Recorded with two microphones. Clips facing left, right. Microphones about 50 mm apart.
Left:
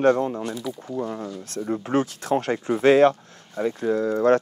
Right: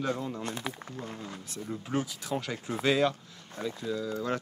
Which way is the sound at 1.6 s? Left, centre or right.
Left.